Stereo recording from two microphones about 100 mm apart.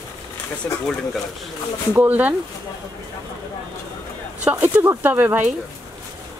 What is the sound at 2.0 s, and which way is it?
Speech, 15° right (ahead or behind).